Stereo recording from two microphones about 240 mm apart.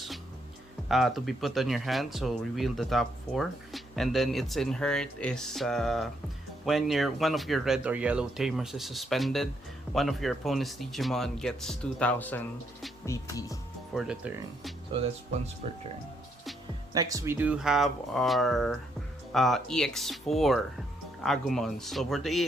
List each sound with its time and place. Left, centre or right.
0.9 s speech: centre
13.9 s speech: centre
15.6 s speech: right
16.9 s speech: centre